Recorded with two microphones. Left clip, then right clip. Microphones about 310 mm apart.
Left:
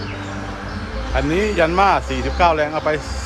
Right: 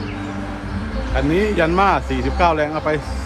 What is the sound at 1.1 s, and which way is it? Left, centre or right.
A man's voice, centre.